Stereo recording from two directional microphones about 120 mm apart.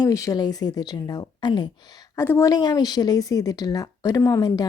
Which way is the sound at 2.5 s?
35° left (ahead or behind).